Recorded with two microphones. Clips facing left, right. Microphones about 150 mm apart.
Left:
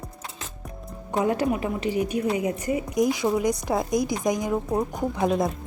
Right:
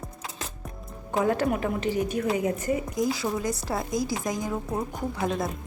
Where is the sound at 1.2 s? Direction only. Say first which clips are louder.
Left 1 dB; 15° left (ahead or behind).